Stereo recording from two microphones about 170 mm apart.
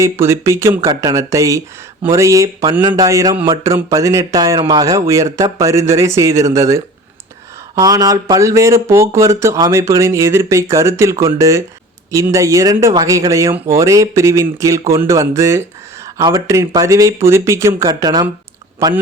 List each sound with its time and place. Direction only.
0.0 s speech: 15° right (ahead or behind)